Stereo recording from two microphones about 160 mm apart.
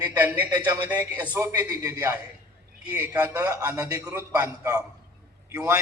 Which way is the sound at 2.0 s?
10° right (ahead or behind).